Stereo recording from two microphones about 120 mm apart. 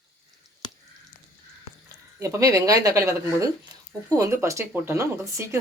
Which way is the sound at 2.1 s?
25° right (ahead or behind).